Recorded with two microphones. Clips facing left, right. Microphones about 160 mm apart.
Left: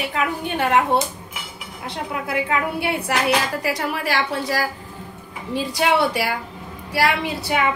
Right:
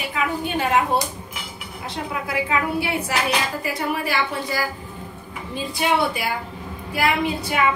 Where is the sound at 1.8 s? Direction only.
55° left (ahead or behind).